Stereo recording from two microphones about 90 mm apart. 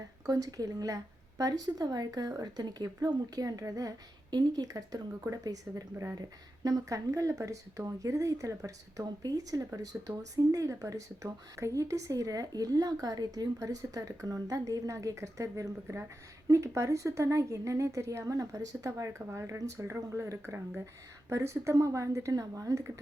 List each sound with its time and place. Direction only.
0.3 s speech: 40° right (ahead or behind)